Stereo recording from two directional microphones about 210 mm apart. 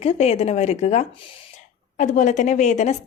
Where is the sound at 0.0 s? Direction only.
30° left (ahead or behind).